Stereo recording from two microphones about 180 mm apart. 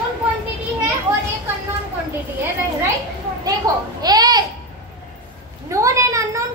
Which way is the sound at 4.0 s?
20° right (ahead or behind).